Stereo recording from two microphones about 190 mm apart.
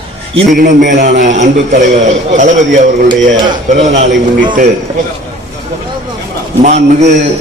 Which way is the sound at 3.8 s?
35° right (ahead or behind).